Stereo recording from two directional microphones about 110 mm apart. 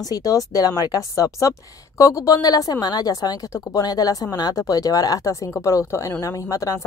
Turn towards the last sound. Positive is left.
turn(degrees=30)  # may be behind; listen again after turning